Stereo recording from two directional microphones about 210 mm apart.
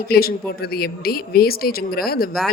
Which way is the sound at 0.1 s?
45° left (ahead or behind).